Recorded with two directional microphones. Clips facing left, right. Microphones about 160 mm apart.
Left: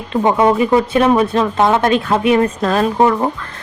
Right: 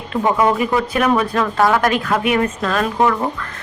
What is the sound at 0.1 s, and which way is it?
Speech, 25° left (ahead or behind).